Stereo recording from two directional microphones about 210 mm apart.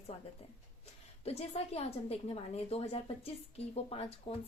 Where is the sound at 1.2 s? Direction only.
30° left (ahead or behind).